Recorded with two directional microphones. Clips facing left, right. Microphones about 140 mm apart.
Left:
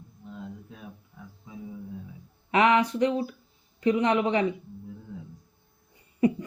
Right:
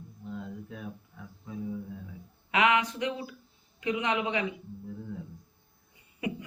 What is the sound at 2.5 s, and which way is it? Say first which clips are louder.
Speech: left 4 dB; 35° left (ahead or behind).